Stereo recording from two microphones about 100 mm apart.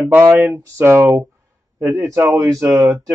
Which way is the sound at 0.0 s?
20° right (ahead or behind).